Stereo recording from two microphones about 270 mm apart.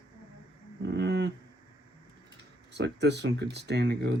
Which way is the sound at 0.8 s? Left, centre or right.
Right.